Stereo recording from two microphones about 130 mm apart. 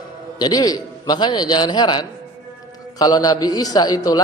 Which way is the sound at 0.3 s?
30° left (ahead or behind).